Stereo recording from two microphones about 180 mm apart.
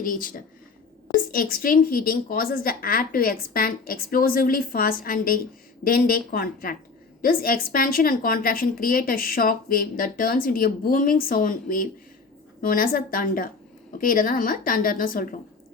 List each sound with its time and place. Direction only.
0.0 s a woman's voice: 50° left (ahead or behind)